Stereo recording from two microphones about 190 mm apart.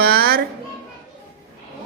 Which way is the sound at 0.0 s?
55° right (ahead or behind).